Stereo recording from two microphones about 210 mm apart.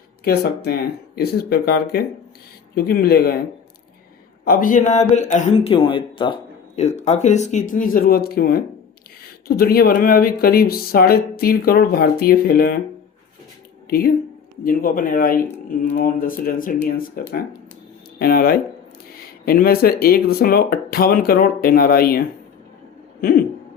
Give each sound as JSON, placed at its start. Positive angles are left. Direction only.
{"t": 0.3, "sound": "speech", "side_deg": 50}
{"t": 4.4, "sound": "a man's voice", "side_deg": 40}
{"t": 14.6, "sound": "speech", "side_deg": 40}
{"t": 23.2, "sound": "speech", "side_deg": 45}